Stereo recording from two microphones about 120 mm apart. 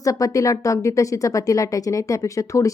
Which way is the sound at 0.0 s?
30° left (ahead or behind).